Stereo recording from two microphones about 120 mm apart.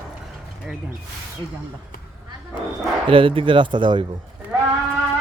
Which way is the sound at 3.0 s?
50° right (ahead or behind).